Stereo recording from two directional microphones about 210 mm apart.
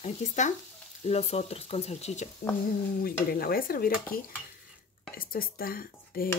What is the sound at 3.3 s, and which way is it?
Speech, 45° left (ahead or behind).